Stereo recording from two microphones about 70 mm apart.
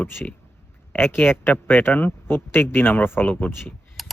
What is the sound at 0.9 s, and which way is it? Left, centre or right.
Speech, left.